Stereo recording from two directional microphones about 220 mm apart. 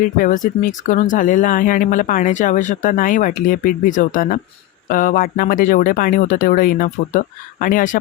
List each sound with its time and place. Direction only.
0.2 s speech: 35° left (ahead or behind)